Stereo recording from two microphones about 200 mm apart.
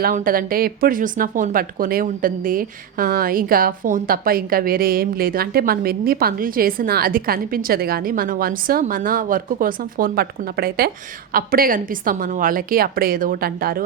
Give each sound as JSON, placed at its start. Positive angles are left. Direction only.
{"t": 0.0, "sound": "speech", "side_deg": -45}